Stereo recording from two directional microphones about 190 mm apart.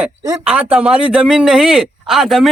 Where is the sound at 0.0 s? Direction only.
5° right (ahead or behind).